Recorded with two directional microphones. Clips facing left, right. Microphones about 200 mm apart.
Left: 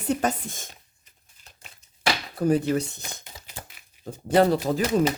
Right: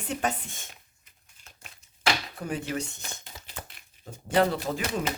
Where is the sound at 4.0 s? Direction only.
10° left (ahead or behind).